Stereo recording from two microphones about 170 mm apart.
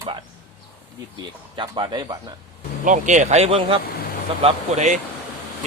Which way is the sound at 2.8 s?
45° right (ahead or behind).